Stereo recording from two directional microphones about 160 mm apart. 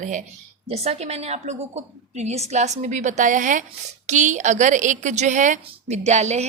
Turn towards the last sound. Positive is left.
turn(degrees=-45)  # may be behind; listen again after turning